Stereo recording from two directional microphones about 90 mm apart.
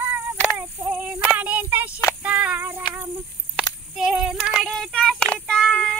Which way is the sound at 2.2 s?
15° right (ahead or behind).